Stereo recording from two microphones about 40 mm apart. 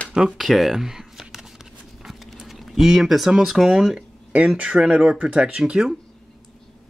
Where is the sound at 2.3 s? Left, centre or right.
Centre.